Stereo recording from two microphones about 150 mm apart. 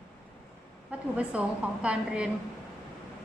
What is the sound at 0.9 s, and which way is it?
A woman's voice, 10° right (ahead or behind).